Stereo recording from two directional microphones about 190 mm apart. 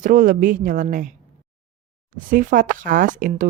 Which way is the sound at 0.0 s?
45° right (ahead or behind).